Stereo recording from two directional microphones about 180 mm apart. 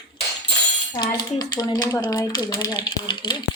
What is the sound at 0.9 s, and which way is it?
Typewriter, 20° left (ahead or behind).